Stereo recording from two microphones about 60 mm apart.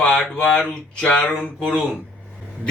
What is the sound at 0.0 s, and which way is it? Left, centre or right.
Speech, centre.